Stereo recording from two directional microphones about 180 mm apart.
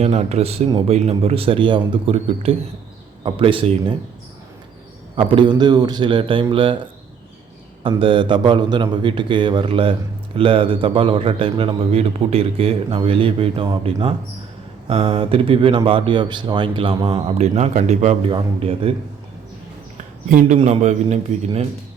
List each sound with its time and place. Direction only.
0.0 s a man's voice: 35° right (ahead or behind)
5.1 s speech: 30° right (ahead or behind)
7.9 s a man's voice: 30° right (ahead or behind)
20.6 s a man's voice: 40° right (ahead or behind)